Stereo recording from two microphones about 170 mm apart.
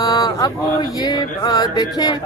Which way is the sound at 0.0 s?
20° left (ahead or behind).